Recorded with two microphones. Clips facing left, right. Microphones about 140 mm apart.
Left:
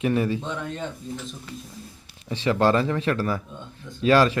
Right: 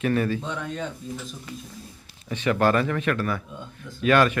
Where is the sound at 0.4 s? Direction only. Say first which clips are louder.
Even; centre (ahead or behind).